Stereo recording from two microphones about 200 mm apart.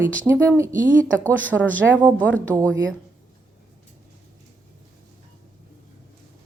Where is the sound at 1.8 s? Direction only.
10° right (ahead or behind).